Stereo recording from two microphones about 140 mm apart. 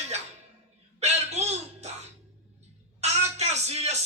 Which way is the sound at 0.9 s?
50° right (ahead or behind).